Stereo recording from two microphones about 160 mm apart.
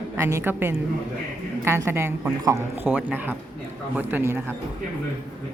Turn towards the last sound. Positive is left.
turn(degrees=-15)  # may be behind; listen again after turning